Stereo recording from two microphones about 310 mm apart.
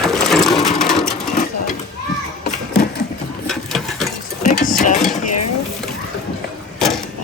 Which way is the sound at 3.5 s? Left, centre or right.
Centre.